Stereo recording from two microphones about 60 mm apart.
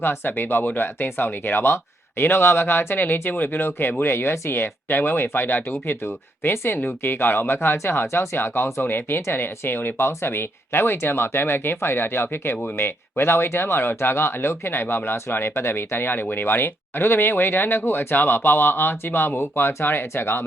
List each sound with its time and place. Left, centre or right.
0.0 s speech: left
8.8 s speech: left